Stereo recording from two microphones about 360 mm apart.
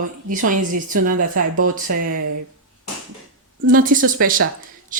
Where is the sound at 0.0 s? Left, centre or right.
Right.